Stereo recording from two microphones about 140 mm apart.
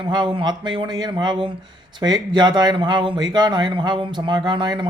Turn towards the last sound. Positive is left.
turn(degrees=-35)  # may be behind; listen again after turning